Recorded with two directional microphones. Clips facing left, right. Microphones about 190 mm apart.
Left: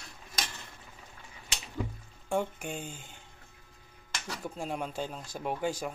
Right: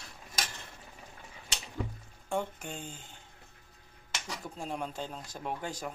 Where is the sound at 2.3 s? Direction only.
10° left (ahead or behind).